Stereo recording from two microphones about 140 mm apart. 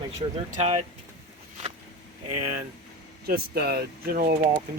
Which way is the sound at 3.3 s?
90° right.